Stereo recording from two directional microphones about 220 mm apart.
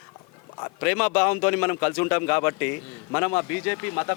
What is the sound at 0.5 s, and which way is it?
Speech, 20° left (ahead or behind).